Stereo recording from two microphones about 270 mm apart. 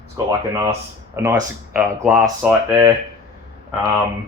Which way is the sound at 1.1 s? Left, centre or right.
Centre.